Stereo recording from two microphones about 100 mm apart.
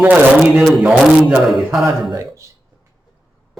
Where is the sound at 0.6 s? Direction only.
5° right (ahead or behind).